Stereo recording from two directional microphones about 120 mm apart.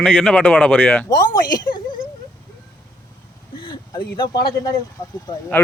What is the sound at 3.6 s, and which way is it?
Speech, 35° left (ahead or behind).